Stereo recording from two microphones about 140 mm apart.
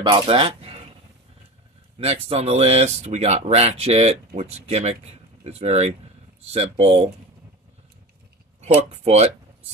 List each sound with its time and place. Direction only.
0.0 s speech: 35° right (ahead or behind)
2.0 s speech: 45° right (ahead or behind)
8.8 s speech: 45° right (ahead or behind)